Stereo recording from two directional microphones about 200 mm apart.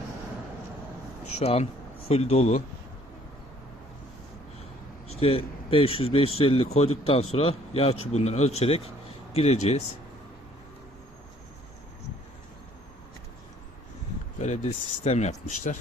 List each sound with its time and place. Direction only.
1.4 s speech: 30° left (ahead or behind)
5.0 s speech: 30° left (ahead or behind)
14.3 s speech: 35° left (ahead or behind)